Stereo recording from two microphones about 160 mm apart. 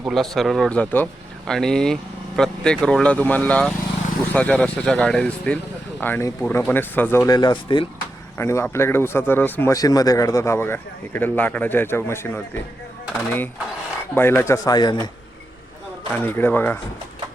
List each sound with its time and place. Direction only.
0.0 s speech: centre (ahead or behind)
7.3 s a man's voice: 25° left (ahead or behind)
8.4 s speech: 15° left (ahead or behind)
14.2 s a man's voice: 15° left (ahead or behind)
16.1 s speech: 10° left (ahead or behind)